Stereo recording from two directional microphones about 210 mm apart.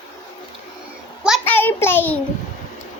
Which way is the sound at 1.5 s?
10° left (ahead or behind).